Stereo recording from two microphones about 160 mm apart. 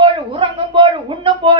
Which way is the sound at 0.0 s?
30° right (ahead or behind).